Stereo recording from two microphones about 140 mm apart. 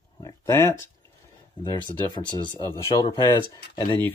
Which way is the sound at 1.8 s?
30° left (ahead or behind).